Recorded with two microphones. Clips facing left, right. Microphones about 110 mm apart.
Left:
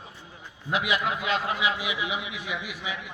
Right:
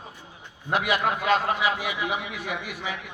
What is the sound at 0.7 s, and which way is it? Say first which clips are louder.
A man's voice: right 2 dB; 50° right (ahead or behind).